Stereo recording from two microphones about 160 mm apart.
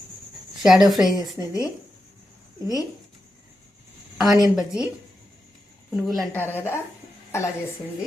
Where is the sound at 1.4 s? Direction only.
15° right (ahead or behind).